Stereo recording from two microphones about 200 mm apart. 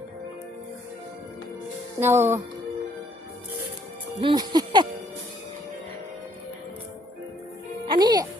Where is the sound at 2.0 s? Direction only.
10° right (ahead or behind).